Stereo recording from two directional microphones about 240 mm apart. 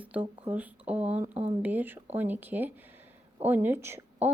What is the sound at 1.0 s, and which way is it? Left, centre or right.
Speech, right.